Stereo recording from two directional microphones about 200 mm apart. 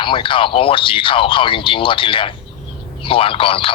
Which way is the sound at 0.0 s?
25° left (ahead or behind).